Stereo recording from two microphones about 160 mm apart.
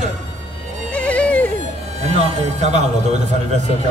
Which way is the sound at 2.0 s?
45° right (ahead or behind).